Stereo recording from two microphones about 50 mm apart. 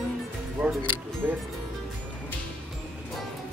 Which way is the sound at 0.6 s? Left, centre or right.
Right.